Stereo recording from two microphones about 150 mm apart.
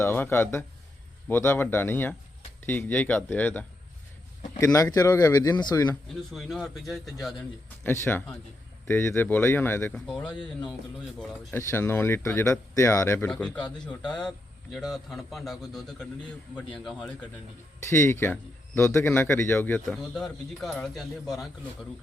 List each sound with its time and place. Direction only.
0.0 s speech: 15° left (ahead or behind)
4.5 s speech: 20° left (ahead or behind)
6.3 s a man's voice: centre (ahead or behind)
7.9 s speech: 15° left (ahead or behind)
11.5 s a man's voice: 15° left (ahead or behind); by 21.5 s centre (ahead or behind)